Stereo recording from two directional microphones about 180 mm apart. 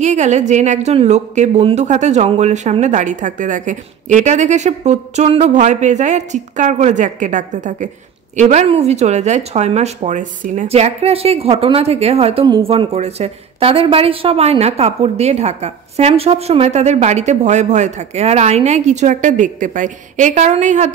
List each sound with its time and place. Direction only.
0.0 s speech: 40° right (ahead or behind)